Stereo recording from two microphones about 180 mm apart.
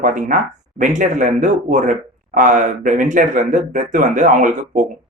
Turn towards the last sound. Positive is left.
turn(degrees=-45)  # may be behind; listen again after turning